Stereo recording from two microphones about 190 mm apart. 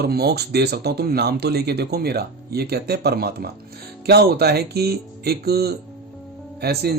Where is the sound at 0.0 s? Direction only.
55° right (ahead or behind).